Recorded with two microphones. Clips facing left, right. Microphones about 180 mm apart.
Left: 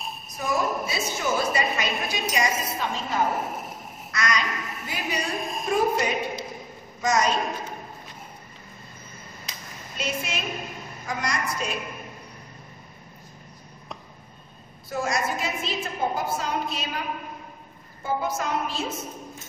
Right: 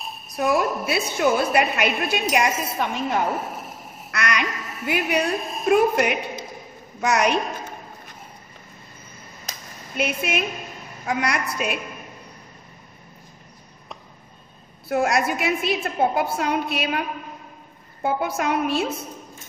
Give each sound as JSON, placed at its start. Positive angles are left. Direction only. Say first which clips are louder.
{"t": 0.4, "sound": "a woman's voice", "louder": "right 5 dB", "side_deg": -65}
{"t": 4.1, "sound": "quack", "louder": "right 2 dB", "side_deg": -60}
{"t": 5.7, "sound": "a woman's voice", "louder": "right 6 dB", "side_deg": -65}
{"t": 9.5, "sound": "a sound", "louder": "right 6 dB", "side_deg": -45}
{"t": 9.9, "sound": "a woman's voice", "louder": "right 6 dB", "side_deg": -60}
{"t": 14.9, "sound": "a woman's voice", "louder": "right 6 dB", "side_deg": -65}
{"t": 18.0, "sound": "a woman's voice", "louder": "right 4 dB", "side_deg": -65}